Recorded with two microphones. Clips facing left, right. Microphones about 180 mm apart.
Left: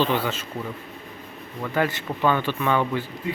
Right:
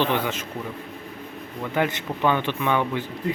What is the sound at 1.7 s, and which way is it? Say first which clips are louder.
Speech: even; 15° right (ahead or behind).